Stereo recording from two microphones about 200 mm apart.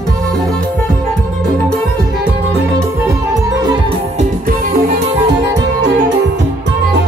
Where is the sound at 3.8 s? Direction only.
35° right (ahead or behind).